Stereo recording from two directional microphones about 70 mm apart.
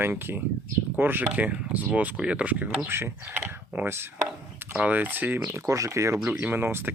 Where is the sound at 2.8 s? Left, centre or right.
Right.